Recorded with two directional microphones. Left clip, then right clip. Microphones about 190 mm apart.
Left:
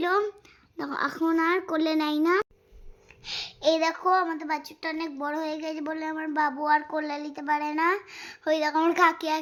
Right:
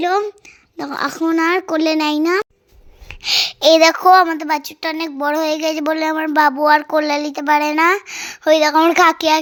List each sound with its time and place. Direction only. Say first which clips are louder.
0.0 s a sound: right 8 dB; 15° right (ahead or behind)
0.8 s a child's voice: right 7 dB; 20° right (ahead or behind)
3.1 s a woman's voice: right 18 dB; 40° right (ahead or behind)